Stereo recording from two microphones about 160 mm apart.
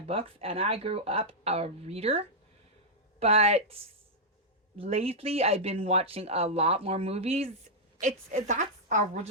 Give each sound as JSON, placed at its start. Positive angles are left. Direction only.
{"t": 0.1, "sound": "a woman's voice", "side_deg": -35}